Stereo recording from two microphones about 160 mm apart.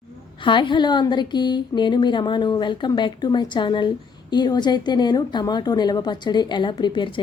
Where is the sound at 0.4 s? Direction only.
30° left (ahead or behind).